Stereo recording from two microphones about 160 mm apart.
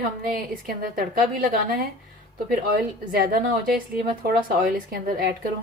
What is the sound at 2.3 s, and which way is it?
A woman's voice, 65° right (ahead or behind).